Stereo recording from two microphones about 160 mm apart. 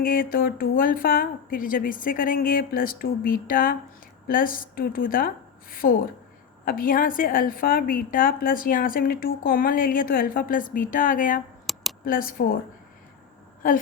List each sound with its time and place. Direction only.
0.0 s a woman's voice: 60° left (ahead or behind)
11.6 s a sound: centre (ahead or behind)
12.0 s a woman's voice: 60° left (ahead or behind)